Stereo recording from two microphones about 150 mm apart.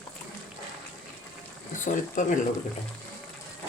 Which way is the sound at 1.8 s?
60° left (ahead or behind).